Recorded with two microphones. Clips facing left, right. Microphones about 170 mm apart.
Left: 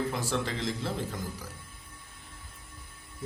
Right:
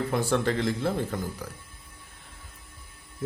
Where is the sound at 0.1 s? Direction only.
60° right (ahead or behind).